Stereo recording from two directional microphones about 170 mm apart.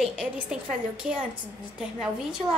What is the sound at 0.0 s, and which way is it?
Speech, 5° right (ahead or behind).